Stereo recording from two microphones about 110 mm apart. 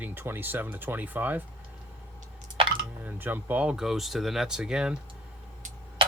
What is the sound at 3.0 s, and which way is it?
Speech, 15° right (ahead or behind).